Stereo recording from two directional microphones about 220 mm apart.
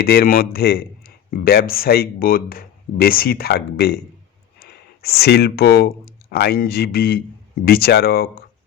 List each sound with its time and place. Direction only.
0.0 s speech: 45° left (ahead or behind)